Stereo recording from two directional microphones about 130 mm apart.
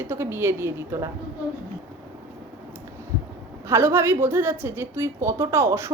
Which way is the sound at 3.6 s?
20° right (ahead or behind).